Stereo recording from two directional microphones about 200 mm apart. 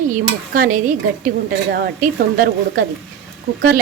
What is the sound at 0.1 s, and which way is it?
Stir, 40° right (ahead or behind).